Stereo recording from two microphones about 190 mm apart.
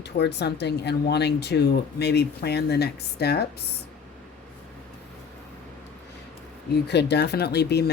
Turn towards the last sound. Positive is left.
turn(degrees=60)  # may be behind; listen again after turning